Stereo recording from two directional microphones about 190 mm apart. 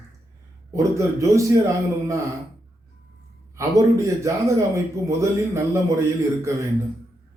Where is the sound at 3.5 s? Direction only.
15° right (ahead or behind).